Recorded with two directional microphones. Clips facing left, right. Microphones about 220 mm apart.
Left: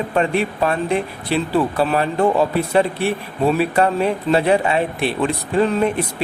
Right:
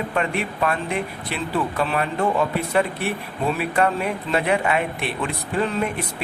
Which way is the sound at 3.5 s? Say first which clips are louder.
Left 2 dB; 30° left (ahead or behind).